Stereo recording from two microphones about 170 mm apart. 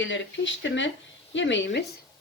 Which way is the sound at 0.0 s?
90° left.